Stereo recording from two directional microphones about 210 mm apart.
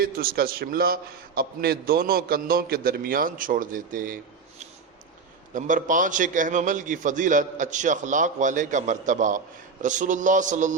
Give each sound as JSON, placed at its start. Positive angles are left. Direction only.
{"t": 0.0, "sound": "a man's voice", "side_deg": -45}
{"t": 5.5, "sound": "a man's voice", "side_deg": -40}